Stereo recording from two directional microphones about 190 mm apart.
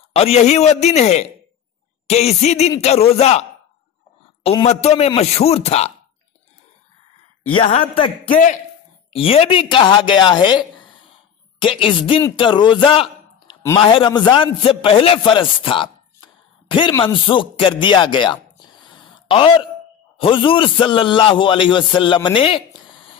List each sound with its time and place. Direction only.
0.1 s a man's voice: 35° left (ahead or behind)
7.5 s a man's voice: 30° left (ahead or behind)
9.1 s a man's voice: 30° left (ahead or behind)
11.6 s a man's voice: 25° left (ahead or behind)